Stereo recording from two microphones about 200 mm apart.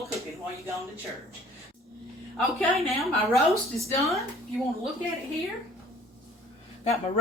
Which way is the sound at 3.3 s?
15° right (ahead or behind).